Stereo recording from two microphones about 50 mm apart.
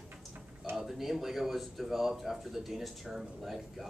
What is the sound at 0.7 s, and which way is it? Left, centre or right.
Speech, centre.